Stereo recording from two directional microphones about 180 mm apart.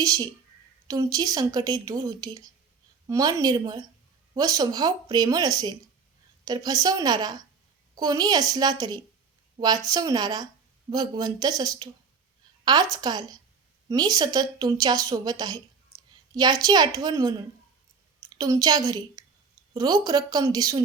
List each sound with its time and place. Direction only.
0.0 s a woman's voice: 20° right (ahead or behind)